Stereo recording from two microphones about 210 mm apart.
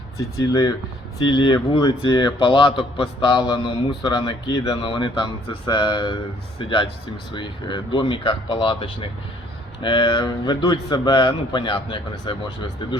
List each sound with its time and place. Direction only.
0.2 s a man's voice: 15° left (ahead or behind)